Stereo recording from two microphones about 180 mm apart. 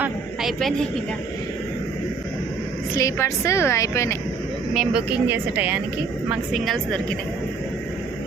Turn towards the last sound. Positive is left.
turn(degrees=0)  # may be behind; listen again after turning